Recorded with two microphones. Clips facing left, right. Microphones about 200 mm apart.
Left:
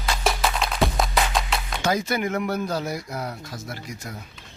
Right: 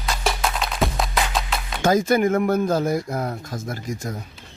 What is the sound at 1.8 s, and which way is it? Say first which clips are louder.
Speech: right 7 dB; 50° right (ahead or behind).